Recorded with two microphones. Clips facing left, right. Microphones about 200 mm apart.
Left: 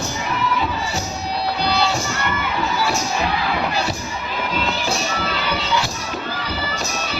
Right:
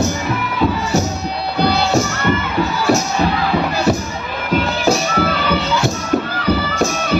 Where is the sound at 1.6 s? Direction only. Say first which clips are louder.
Right 7 dB; 55° right (ahead or behind).